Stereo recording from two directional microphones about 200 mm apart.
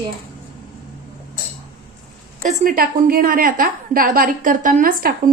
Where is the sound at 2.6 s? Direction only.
45° right (ahead or behind).